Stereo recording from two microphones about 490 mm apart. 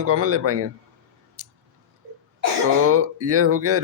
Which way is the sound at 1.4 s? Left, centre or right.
Right.